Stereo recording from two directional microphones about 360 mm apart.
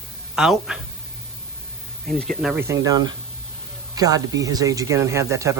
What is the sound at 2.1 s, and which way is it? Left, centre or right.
A man's voice, centre.